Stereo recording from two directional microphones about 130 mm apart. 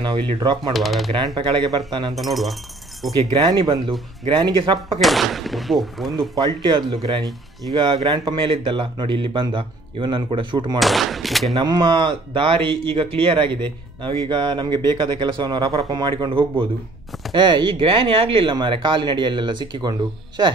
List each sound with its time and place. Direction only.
0.4 s speech: 35° right (ahead or behind)
0.7 s speech: centre (ahead or behind)
1.3 s speech: 40° right (ahead or behind)
2.1 s speech: centre (ahead or behind)
3.3 s speech: 35° right (ahead or behind)
5.0 s speech: centre (ahead or behind)
6.4 s speech: 40° right (ahead or behind)
10.8 s speech: centre (ahead or behind)
11.5 s speech: 35° right (ahead or behind)